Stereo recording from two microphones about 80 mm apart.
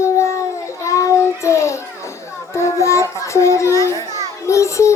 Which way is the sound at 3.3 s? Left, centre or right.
Left.